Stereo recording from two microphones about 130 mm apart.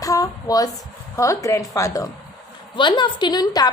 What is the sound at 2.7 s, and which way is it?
Speech, 35° left (ahead or behind).